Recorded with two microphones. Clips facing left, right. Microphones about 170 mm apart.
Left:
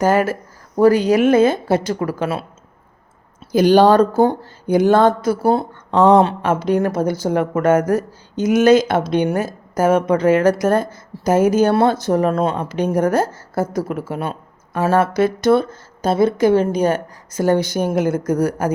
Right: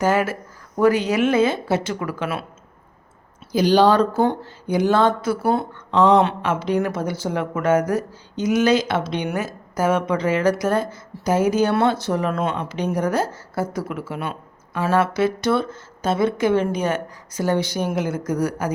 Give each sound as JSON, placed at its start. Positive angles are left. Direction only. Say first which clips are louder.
{"t": 0.0, "sound": "speech", "louder": "left 4 dB", "side_deg": 40}
{"t": 3.5, "sound": "speech", "louder": "left 4 dB", "side_deg": 50}